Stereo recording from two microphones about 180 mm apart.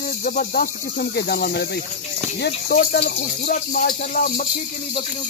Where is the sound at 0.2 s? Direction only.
55° left (ahead or behind).